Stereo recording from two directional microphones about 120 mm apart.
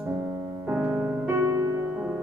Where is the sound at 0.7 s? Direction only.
20° right (ahead or behind).